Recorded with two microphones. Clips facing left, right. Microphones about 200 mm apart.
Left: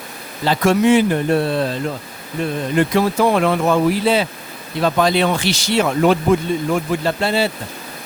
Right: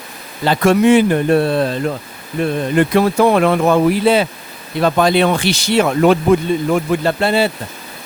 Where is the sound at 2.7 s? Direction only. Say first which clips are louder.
Right 3 dB; 60° right (ahead or behind).